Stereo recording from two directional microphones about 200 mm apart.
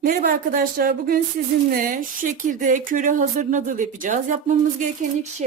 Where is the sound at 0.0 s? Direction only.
45° right (ahead or behind).